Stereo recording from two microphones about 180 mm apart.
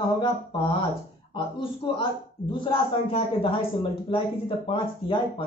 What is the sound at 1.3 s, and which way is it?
A man's voice, 30° left (ahead or behind).